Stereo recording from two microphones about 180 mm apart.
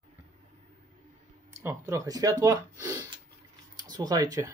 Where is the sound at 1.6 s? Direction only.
15° right (ahead or behind).